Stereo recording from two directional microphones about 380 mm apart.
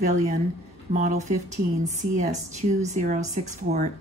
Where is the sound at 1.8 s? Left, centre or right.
Centre.